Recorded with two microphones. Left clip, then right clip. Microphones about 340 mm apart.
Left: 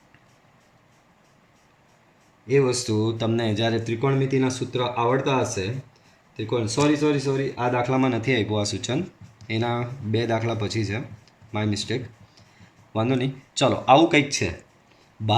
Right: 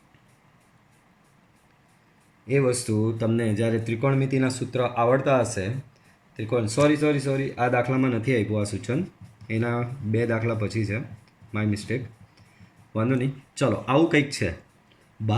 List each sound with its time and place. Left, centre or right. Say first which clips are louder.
2.5 s speech: left 2 dB; centre
13.0 s speech: left 2 dB; centre